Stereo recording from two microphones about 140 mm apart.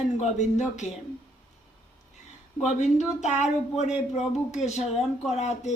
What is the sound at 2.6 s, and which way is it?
A man's voice, 60° left (ahead or behind).